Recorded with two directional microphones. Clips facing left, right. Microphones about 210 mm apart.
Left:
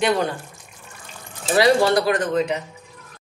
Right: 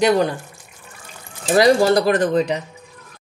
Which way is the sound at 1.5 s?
40° right (ahead or behind).